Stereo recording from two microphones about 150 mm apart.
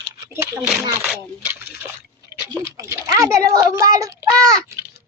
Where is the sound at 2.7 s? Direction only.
20° right (ahead or behind).